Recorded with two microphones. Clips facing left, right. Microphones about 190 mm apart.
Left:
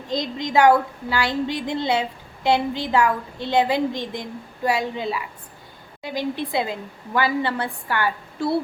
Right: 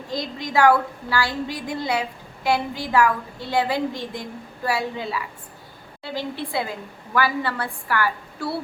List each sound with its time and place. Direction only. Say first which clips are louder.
0.1 s a woman's voice: left 3 dB; 20° left (ahead or behind)